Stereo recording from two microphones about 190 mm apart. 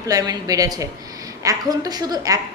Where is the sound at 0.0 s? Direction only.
20° right (ahead or behind).